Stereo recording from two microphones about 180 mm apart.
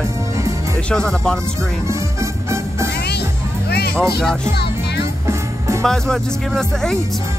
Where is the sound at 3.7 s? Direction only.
60° left (ahead or behind).